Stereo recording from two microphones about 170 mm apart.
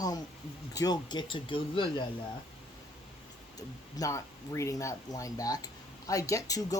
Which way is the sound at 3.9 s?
20° left (ahead or behind).